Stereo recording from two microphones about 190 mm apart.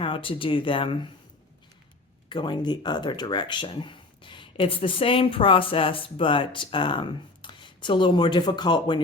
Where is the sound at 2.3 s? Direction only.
25° left (ahead or behind).